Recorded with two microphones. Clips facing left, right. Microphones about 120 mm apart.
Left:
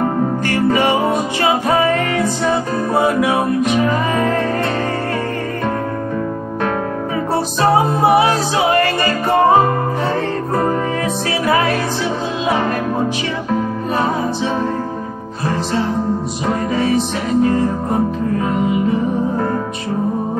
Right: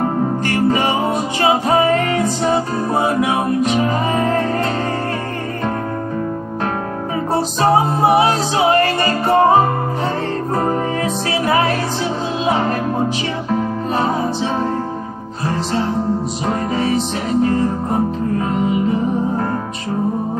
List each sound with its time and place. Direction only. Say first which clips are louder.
0.5 s music: left 2 dB; 30° right (ahead or behind)
7.7 s music: left 1 dB; 30° right (ahead or behind)
13.9 s music: even; 30° right (ahead or behind)
16.4 s music: left 2 dB; 35° right (ahead or behind)